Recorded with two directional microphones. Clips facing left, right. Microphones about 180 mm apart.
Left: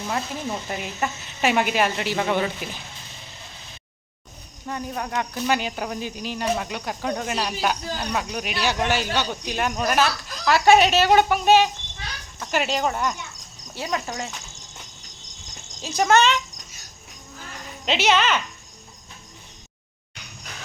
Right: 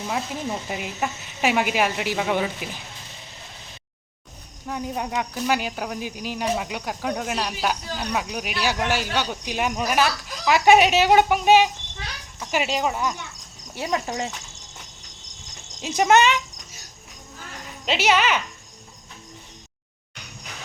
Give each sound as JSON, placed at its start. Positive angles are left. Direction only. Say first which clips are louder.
{"t": 0.1, "sound": "speech", "louder": "even", "side_deg": -5}
{"t": 4.9, "sound": "speech", "louder": "left 1 dB", "side_deg": -15}
{"t": 13.7, "sound": "speech", "louder": "right 2 dB", "side_deg": -25}
{"t": 15.8, "sound": "speech", "louder": "right 1 dB", "side_deg": -20}
{"t": 17.8, "sound": "speech", "louder": "even", "side_deg": -10}